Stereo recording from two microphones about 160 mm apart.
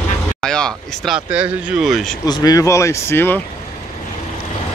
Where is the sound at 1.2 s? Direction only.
5° right (ahead or behind).